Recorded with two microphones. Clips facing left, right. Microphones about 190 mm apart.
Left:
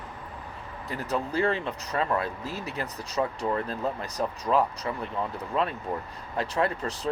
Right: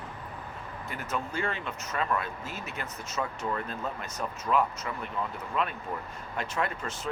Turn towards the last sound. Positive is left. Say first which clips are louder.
# left 5 dB
turn(degrees=35)  # may be behind; listen again after turning